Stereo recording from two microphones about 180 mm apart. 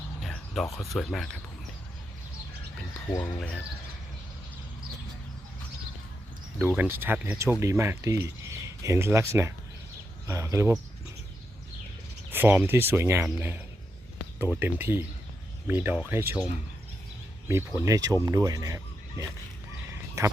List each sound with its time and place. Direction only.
0.2 s speech: 5° left (ahead or behind)
3.1 s speech: 20° left (ahead or behind)
6.6 s speech: 10° right (ahead or behind)
12.3 s speech: 10° right (ahead or behind)
17.7 s speech: 20° right (ahead or behind)
19.9 s fowl: 15° right (ahead or behind)